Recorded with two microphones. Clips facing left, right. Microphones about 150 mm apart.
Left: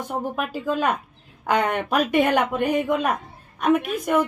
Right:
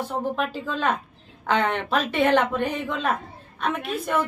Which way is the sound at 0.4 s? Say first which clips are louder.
Left 2 dB; 10° left (ahead or behind).